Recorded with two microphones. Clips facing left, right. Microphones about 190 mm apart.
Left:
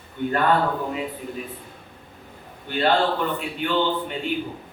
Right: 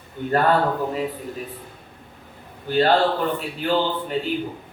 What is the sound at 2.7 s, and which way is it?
A man's voice, 40° right (ahead or behind).